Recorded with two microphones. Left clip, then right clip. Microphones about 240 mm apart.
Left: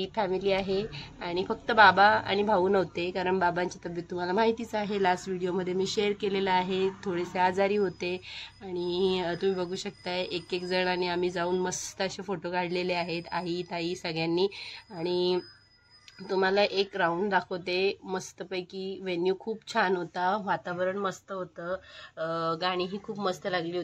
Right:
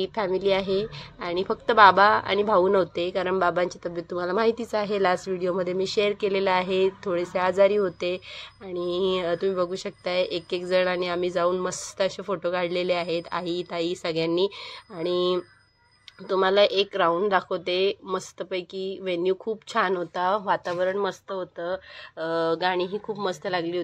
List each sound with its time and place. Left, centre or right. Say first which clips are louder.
0.0 s a woman's voice: right 4 dB; centre